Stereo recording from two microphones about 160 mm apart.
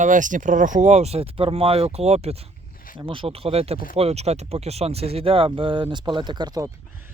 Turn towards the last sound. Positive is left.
turn(degrees=-25)  # may be behind; listen again after turning